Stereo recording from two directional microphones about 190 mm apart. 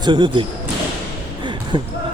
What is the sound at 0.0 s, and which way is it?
Speech, 25° right (ahead or behind).